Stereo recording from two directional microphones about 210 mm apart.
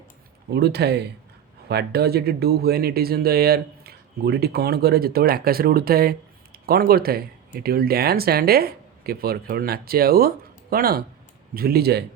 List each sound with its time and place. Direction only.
0.5 s speech: 50° right (ahead or behind)